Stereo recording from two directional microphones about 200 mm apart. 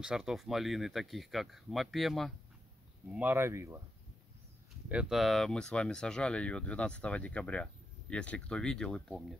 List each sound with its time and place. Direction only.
0.0 s speech: 5° right (ahead or behind)
4.8 s speech: 5° right (ahead or behind)